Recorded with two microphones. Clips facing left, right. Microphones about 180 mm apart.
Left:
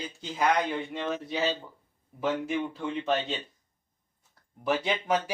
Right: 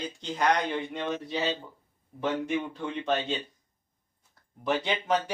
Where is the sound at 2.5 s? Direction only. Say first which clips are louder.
Even; centre (ahead or behind).